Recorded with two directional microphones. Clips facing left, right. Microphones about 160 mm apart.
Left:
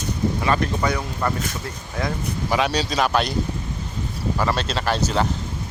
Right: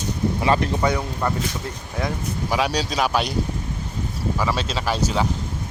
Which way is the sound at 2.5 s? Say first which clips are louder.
Left 1 dB; 5° right (ahead or behind).